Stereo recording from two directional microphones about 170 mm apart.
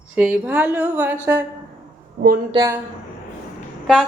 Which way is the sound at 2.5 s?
20° right (ahead or behind).